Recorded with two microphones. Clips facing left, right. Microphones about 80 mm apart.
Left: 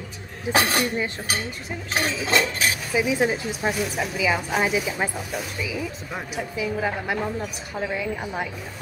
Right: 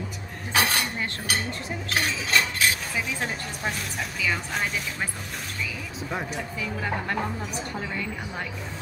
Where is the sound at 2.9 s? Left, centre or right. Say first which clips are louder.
Left 8 dB; centre.